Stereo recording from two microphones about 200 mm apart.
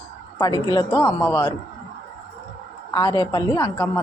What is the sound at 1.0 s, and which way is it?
Speech, 10° left (ahead or behind).